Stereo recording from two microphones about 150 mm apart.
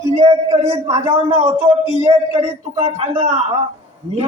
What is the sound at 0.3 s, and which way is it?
A man's voice, 25° right (ahead or behind).